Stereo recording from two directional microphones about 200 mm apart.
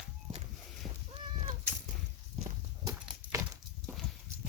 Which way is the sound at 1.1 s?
30° right (ahead or behind).